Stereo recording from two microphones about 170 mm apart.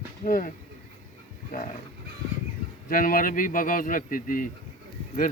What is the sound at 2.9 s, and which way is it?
Speech, 55° left (ahead or behind).